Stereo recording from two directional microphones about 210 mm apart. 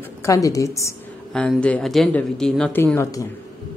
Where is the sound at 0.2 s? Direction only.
15° left (ahead or behind).